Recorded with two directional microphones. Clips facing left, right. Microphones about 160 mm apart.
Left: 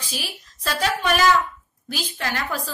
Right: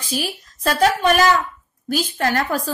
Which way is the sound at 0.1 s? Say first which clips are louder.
Right 10 dB; 45° right (ahead or behind).